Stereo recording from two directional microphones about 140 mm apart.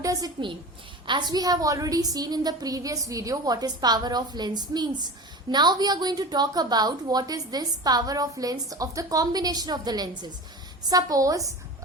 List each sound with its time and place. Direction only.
0.0 s a woman's voice: 25° right (ahead or behind)